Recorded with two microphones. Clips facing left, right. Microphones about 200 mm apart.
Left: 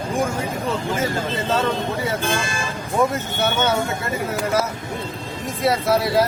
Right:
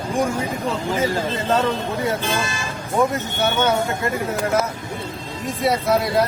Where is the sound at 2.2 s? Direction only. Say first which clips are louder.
Even; 50° left (ahead or behind).